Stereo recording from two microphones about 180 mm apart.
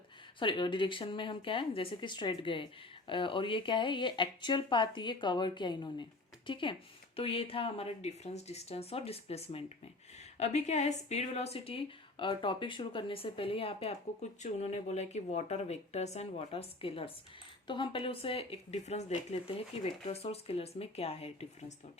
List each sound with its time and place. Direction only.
0.3 s a woman's voice: 25° left (ahead or behind)